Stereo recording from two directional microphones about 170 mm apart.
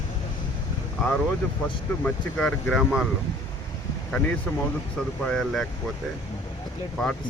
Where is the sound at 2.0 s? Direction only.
5° left (ahead or behind).